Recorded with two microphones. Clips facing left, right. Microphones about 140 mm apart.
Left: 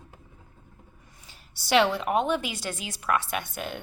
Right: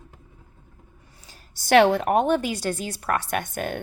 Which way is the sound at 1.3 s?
45° right (ahead or behind).